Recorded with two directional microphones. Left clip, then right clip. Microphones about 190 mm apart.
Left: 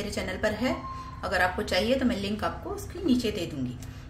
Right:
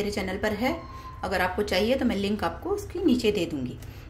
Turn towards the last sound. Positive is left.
turn(degrees=-25)  # may be behind; listen again after turning